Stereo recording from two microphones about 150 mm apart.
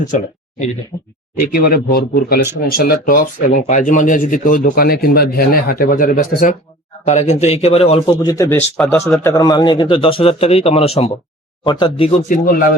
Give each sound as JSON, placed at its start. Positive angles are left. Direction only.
{"t": 0.1, "sound": "speech", "side_deg": 55}
{"t": 1.4, "sound": "speech", "side_deg": 85}
{"t": 7.0, "sound": "speech", "side_deg": 50}
{"t": 8.1, "sound": "speech", "side_deg": 25}
{"t": 8.4, "sound": "a man's voice", "side_deg": 15}
{"t": 11.6, "sound": "a man's voice", "side_deg": 30}
{"t": 12.3, "sound": "speech", "side_deg": 75}